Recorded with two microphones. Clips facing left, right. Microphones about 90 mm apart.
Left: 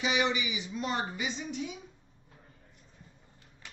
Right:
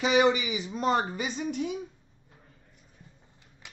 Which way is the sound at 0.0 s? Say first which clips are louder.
Right 7 dB; 45° right (ahead or behind).